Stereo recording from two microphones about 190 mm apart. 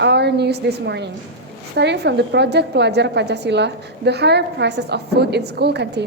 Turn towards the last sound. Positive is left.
turn(degrees=-60)  # may be behind; listen again after turning